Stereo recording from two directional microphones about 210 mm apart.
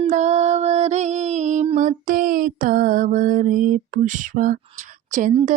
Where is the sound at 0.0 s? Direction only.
35° right (ahead or behind).